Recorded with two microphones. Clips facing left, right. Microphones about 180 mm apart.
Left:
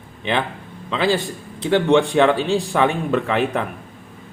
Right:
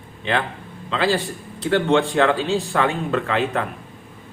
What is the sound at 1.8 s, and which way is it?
Speech, 15° left (ahead or behind).